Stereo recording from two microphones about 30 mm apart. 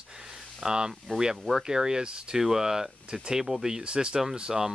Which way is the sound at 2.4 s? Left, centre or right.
Centre.